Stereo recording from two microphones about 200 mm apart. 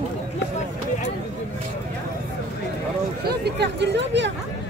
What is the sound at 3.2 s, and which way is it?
Speech, 55° right (ahead or behind).